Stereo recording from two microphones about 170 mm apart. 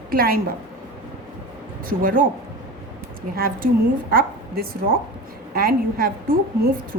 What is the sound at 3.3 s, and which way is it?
A woman's voice, 60° right (ahead or behind).